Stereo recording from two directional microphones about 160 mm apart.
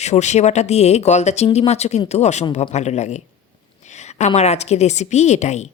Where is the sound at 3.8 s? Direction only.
45° left (ahead or behind).